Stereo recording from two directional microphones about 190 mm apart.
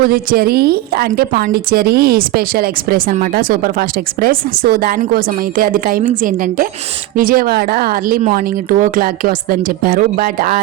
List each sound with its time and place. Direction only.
0.0 s a woman's voice: 50° right (ahead or behind)